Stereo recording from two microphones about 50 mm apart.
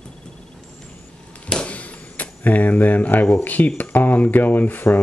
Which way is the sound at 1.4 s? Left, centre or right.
Centre.